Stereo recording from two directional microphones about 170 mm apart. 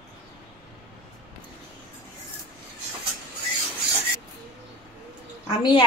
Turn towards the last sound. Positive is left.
turn(degrees=30)  # may be behind; listen again after turning